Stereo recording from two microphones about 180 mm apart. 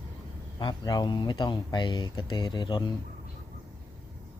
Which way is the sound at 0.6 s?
25° left (ahead or behind).